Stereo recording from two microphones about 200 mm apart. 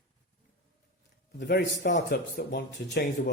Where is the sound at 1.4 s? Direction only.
55° left (ahead or behind).